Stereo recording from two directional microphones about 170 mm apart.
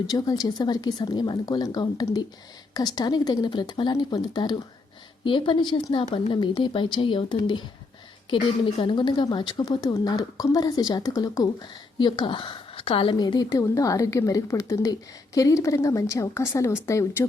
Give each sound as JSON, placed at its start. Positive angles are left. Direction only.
{"t": 0.1, "sound": "a woman's voice", "side_deg": 25}